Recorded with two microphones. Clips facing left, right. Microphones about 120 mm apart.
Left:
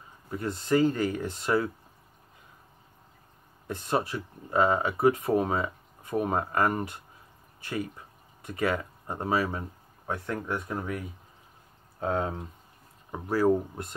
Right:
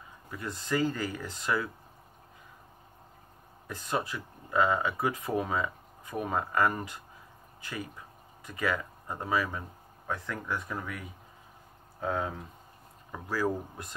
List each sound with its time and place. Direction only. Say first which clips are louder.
0.3 s speech: left 6 dB; 25° left (ahead or behind)
3.6 s speech: left 4 dB; 25° left (ahead or behind)
8.5 s speech: left 3 dB; 25° left (ahead or behind)